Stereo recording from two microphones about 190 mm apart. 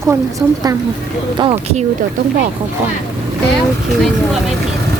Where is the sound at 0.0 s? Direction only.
15° right (ahead or behind).